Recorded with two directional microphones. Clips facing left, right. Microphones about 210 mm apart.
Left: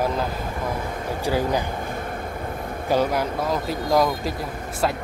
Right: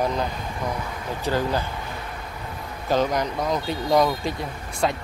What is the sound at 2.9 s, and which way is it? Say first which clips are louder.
Speech: left 1 dB; 10° left (ahead or behind).